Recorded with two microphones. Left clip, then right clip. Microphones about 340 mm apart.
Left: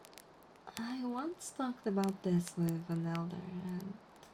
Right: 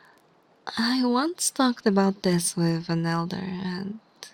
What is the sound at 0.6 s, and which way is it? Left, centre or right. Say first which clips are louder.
Speech: right 17 dB; right.